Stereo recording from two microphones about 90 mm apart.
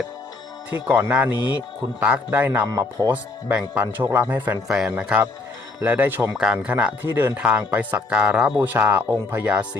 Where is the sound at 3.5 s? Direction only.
20° right (ahead or behind).